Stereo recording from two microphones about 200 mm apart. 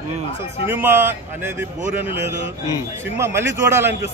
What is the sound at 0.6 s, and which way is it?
A man's voice, 10° right (ahead or behind).